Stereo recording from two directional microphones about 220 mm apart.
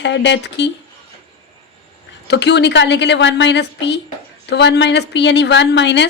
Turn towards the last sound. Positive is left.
turn(degrees=55)  # may be behind; listen again after turning